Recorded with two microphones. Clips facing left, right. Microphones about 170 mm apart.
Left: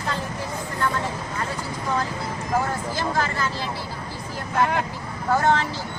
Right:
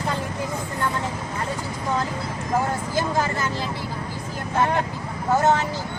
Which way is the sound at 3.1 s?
15° right (ahead or behind).